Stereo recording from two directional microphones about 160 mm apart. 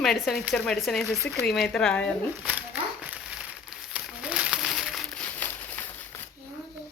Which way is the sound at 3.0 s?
10° right (ahead or behind).